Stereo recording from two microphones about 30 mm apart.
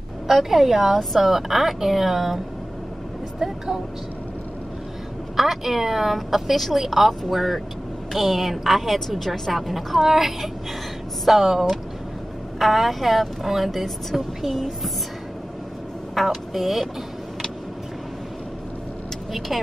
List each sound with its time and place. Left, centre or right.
0.3 s a woman's voice: centre
5.3 s a woman's voice: centre
6.5 s a woman's voice: centre
16.2 s a woman's voice: centre
19.5 s a woman's voice: centre